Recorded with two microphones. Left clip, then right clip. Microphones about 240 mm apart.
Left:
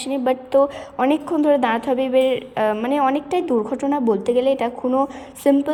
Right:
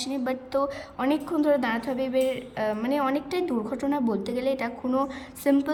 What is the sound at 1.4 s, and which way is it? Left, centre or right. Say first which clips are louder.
Speech: left 7 dB; centre.